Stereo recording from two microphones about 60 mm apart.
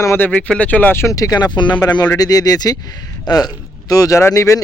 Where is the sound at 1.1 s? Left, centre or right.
Left.